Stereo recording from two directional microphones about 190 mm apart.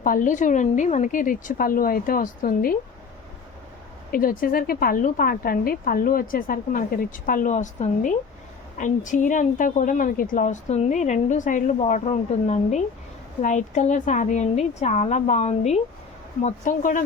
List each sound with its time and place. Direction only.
0.0 s speech: 45° left (ahead or behind)
4.1 s speech: 50° left (ahead or behind)